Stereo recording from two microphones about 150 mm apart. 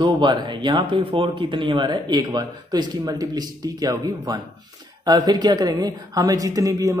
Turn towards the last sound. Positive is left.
turn(degrees=-20)  # may be behind; listen again after turning